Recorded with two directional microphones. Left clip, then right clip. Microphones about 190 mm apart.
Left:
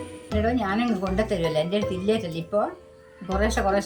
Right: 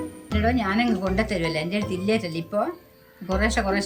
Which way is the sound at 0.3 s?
5° right (ahead or behind).